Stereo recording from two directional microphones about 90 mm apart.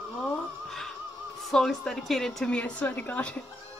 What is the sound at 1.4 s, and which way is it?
A woman's voice, 5° left (ahead or behind).